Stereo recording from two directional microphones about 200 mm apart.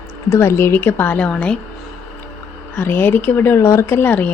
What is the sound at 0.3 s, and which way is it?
Speech, 15° left (ahead or behind).